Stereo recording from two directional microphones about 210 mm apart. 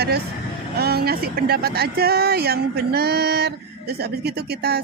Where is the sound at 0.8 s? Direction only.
50° right (ahead or behind).